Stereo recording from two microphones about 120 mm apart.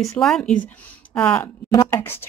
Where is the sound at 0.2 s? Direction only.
5° left (ahead or behind).